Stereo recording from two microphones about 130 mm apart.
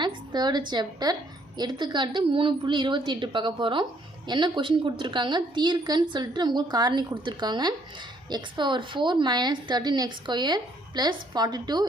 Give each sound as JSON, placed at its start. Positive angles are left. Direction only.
{"t": 0.0, "sound": "a woman's voice", "side_deg": -35}